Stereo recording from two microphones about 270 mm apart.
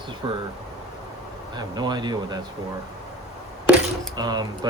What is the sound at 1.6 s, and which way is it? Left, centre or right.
Speech, centre.